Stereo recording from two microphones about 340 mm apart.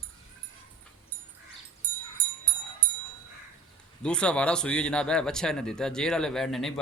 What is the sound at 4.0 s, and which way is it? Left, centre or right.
Speech, centre.